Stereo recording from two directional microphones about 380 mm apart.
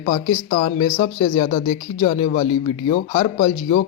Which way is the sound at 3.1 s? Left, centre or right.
Centre.